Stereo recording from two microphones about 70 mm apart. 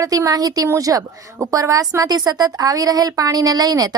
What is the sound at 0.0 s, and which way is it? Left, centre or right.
A woman's voice, right.